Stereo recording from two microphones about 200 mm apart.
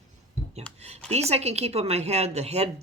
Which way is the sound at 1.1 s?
30° right (ahead or behind).